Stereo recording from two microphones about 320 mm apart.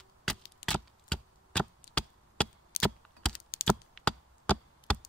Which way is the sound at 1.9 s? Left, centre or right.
Left.